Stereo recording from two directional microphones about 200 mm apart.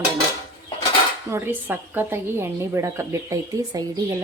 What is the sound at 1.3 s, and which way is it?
A woman's voice, 10° right (ahead or behind).